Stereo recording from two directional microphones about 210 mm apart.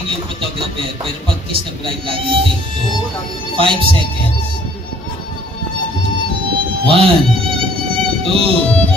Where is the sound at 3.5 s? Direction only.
25° right (ahead or behind).